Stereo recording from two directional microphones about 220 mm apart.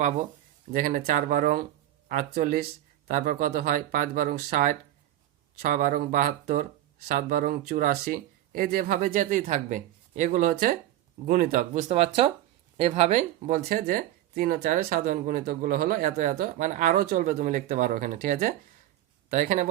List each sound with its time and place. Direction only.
0.0 s speech: 35° right (ahead or behind)